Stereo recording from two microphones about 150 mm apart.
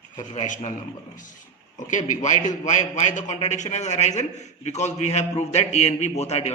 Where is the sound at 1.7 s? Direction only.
55° left (ahead or behind).